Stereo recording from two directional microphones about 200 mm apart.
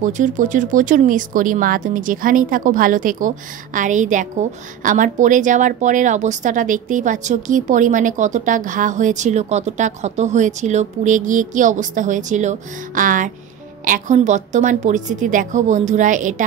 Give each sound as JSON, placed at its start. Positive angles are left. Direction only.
{"t": 0.0, "sound": "speech", "side_deg": -40}